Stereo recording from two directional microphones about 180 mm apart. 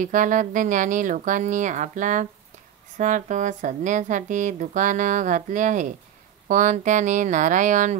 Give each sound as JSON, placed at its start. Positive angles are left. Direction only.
{"t": 0.0, "sound": "speech", "side_deg": -45}